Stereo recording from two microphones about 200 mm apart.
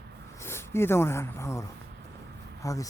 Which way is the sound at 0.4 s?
10° left (ahead or behind).